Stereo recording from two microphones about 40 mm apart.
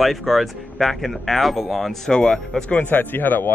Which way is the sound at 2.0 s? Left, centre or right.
Left.